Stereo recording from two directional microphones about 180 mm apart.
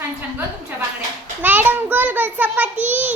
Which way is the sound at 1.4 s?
10° right (ahead or behind).